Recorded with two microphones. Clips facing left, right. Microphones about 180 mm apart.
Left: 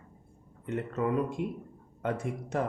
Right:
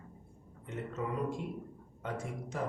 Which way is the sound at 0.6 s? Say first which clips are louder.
Left 7 dB; 65° left (ahead or behind).